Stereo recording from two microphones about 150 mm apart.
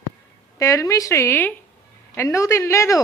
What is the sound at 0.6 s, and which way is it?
A woman's voice, 20° left (ahead or behind).